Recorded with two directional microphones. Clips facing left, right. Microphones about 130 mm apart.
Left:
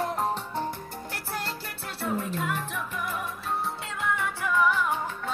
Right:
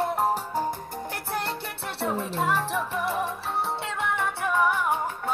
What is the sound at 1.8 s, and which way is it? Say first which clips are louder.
Music: right 1 dB; 70° right (ahead or behind).